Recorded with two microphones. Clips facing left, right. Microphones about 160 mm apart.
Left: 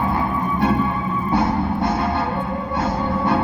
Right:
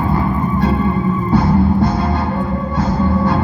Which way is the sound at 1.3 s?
25° left (ahead or behind).